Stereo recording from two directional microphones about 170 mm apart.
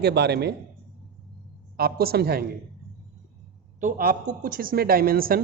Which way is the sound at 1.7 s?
65° right (ahead or behind).